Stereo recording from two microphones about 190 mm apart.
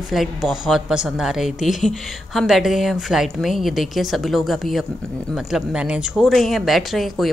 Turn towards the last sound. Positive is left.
turn(degrees=0)  # may be behind; listen again after turning